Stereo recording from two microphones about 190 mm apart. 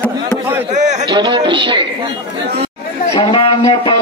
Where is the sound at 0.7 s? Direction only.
40° right (ahead or behind).